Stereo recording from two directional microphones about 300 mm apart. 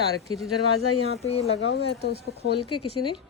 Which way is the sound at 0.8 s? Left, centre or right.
Left.